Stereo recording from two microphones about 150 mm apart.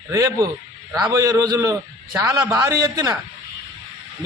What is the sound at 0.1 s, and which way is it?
A man's voice, 25° right (ahead or behind).